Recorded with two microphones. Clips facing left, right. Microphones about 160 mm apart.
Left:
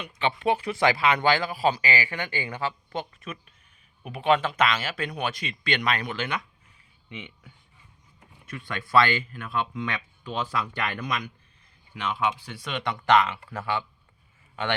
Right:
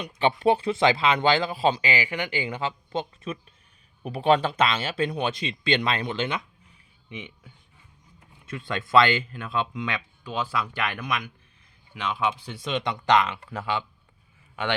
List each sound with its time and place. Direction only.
0.0 s speech: 40° right (ahead or behind)
7.1 s speech: 15° right (ahead or behind)
8.4 s speech: 25° right (ahead or behind); by 11.3 s 5° right (ahead or behind)
12.0 s speech: 15° right (ahead or behind)